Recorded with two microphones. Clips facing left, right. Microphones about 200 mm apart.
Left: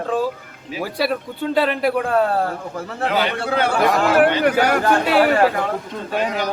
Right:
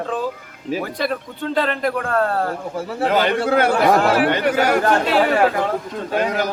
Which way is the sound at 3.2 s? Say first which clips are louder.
Right 3 dB; 45° right (ahead or behind).